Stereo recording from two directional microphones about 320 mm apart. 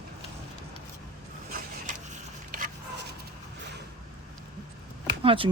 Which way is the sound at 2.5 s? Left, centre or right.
Right.